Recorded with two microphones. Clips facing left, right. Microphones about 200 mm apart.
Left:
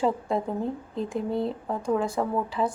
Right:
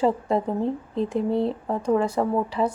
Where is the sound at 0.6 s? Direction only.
35° right (ahead or behind).